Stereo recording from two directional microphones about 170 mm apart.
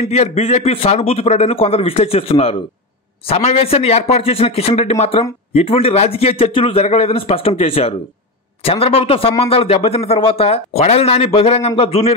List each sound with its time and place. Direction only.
0.0 s speech: 40° left (ahead or behind)